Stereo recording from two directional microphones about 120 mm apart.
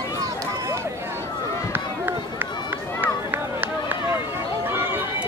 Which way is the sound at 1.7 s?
15° right (ahead or behind).